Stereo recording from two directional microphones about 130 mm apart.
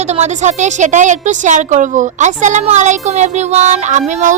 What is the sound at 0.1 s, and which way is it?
A woman's voice, 60° right (ahead or behind).